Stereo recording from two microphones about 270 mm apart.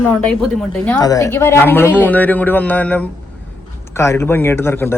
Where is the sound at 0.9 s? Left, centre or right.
Centre.